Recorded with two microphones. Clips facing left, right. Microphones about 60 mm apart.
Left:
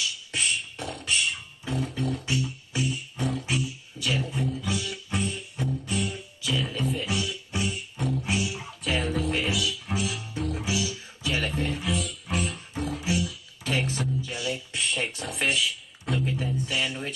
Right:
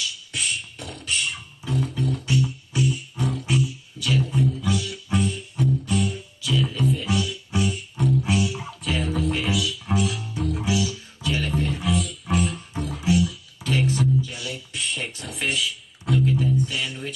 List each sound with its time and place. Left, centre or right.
0.3 s beatboxing: centre
1.1 s beatboxing: centre
2.0 s music: centre
6.6 s music: centre